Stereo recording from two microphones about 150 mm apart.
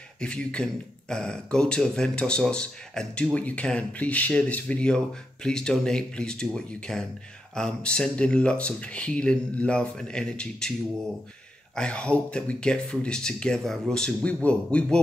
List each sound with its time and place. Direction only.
0.2 s speech: 5° left (ahead or behind)
11.7 s speech: 5° left (ahead or behind)